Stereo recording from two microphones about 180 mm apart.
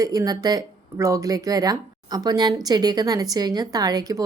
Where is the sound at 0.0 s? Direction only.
20° right (ahead or behind).